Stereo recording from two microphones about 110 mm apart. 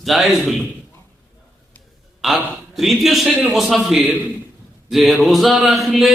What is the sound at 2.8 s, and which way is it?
A man's voice, centre (ahead or behind).